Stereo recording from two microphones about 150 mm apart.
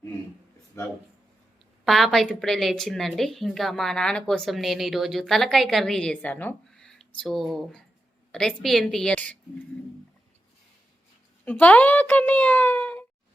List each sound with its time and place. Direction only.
0.8 s speech: 20° left (ahead or behind)
1.8 s a woman's voice: centre (ahead or behind)
11.4 s speech: 10° left (ahead or behind)